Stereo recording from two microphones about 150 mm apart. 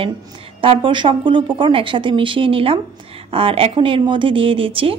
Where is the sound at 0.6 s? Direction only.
35° right (ahead or behind).